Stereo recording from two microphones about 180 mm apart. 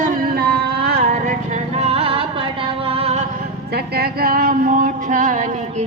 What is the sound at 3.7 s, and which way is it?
Speech, 60° right (ahead or behind).